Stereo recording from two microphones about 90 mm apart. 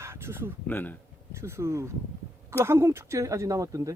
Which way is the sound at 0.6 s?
20° left (ahead or behind).